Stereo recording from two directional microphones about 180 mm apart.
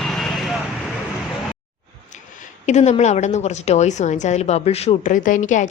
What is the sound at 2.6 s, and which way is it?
A woman's voice, 40° left (ahead or behind).